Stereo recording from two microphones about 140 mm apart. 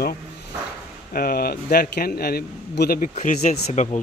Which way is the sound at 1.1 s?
90° left.